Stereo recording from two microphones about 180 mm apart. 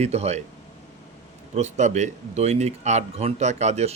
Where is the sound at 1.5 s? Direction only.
40° right (ahead or behind).